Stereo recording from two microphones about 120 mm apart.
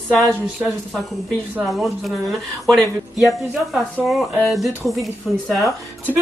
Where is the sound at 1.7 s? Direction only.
Centre (ahead or behind).